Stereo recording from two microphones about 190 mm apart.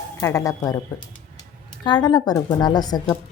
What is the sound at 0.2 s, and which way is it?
Speech, 15° left (ahead or behind).